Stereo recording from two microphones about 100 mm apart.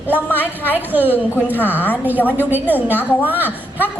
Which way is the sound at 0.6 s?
20° right (ahead or behind).